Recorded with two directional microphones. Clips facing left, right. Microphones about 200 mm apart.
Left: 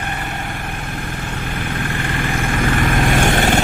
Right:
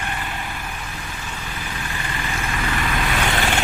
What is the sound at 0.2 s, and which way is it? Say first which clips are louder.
Vehicle: left 4 dB; 45° left (ahead or behind).